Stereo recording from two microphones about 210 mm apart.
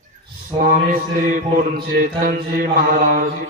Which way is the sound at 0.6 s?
40° right (ahead or behind).